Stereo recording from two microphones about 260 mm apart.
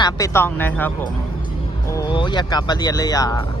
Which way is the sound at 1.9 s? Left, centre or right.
Centre.